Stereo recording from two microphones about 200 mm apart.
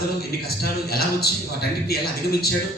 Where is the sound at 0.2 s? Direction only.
50° left (ahead or behind).